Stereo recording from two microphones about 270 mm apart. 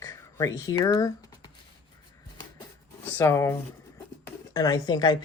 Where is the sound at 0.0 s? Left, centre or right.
Centre.